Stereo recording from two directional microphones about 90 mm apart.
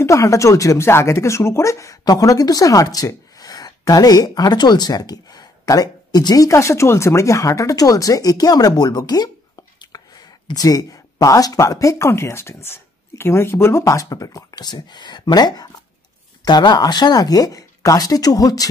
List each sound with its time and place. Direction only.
0.0 s speech: 35° left (ahead or behind)